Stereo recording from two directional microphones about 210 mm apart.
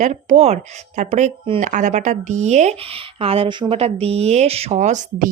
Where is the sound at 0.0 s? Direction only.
35° right (ahead or behind).